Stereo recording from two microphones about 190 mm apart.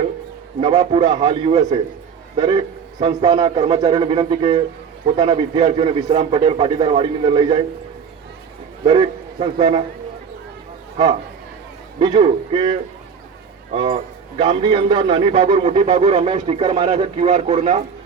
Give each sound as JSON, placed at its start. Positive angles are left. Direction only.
{"t": 0.6, "sound": "a man's voice", "side_deg": -25}
{"t": 8.8, "sound": "a man's voice", "side_deg": -30}
{"t": 11.9, "sound": "a man's voice", "side_deg": -25}
{"t": 14.3, "sound": "a man's voice", "side_deg": -25}